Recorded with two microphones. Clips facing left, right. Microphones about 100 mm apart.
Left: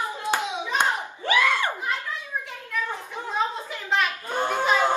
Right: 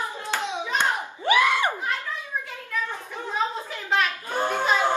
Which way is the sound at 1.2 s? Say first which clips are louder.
Right 2 dB; 15° right (ahead or behind).